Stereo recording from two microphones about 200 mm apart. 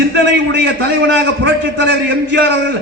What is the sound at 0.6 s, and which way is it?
A man's voice, 65° right (ahead or behind).